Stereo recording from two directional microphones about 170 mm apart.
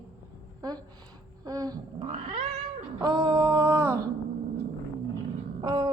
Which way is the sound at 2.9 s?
20° right (ahead or behind).